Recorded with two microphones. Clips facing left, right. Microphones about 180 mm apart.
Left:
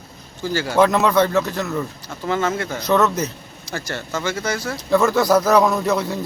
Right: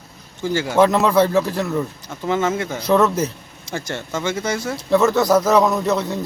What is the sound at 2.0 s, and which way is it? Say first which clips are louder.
Speech: right 1 dB; 20° right (ahead or behind).